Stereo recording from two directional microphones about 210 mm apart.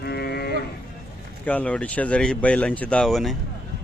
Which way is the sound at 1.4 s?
5° left (ahead or behind).